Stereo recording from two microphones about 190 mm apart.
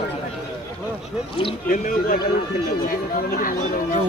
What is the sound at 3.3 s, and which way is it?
Speech, 45° left (ahead or behind).